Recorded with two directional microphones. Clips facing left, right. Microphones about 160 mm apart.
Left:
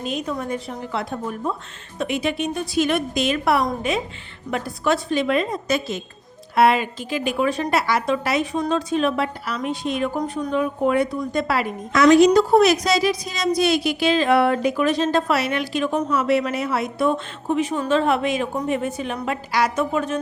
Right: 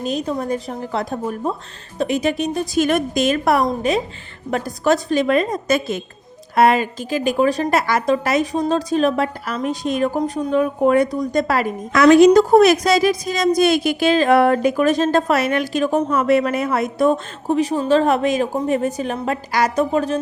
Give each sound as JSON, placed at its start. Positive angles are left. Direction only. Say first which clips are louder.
{"t": 0.0, "sound": "a woman's voice", "louder": "right 4 dB", "side_deg": -35}